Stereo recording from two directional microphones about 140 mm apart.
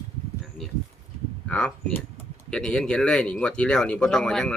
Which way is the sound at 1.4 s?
10° left (ahead or behind).